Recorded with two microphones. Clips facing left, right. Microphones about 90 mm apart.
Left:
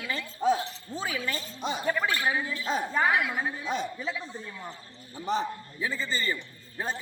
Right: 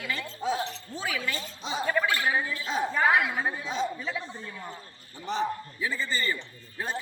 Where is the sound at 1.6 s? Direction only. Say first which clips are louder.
Left 2 dB; 55° left (ahead or behind).